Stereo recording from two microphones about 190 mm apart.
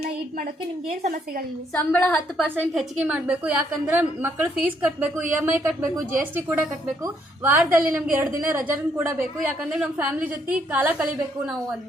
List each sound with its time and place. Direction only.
0.9 s a woman's voice: 40° right (ahead or behind)
1.7 s a woman's voice: 5° left (ahead or behind)
2.6 s a woman's voice: 10° right (ahead or behind)